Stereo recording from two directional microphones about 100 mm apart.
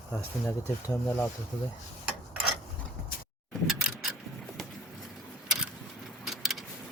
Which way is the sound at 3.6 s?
Centre (ahead or behind).